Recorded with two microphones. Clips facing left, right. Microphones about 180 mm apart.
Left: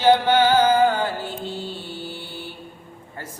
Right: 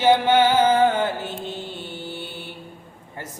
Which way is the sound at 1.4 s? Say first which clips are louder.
Left 1 dB; 20° right (ahead or behind).